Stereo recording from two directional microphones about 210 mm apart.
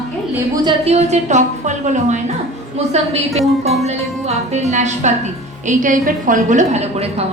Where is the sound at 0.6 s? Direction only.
30° right (ahead or behind).